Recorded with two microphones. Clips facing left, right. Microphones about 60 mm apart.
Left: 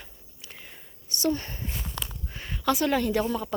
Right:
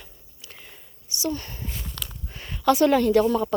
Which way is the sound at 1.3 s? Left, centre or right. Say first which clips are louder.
Left 3 dB; left.